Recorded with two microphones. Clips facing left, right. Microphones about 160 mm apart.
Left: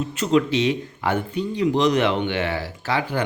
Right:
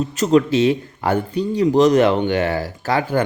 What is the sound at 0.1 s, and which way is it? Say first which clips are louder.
A man's voice: right 4 dB; 40° right (ahead or behind).